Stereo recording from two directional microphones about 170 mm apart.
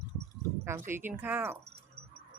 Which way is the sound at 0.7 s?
15° right (ahead or behind).